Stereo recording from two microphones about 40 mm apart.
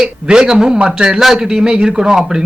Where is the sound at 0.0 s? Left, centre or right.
Centre.